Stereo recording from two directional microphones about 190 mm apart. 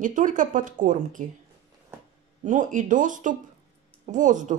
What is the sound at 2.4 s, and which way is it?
Speech, 40° right (ahead or behind).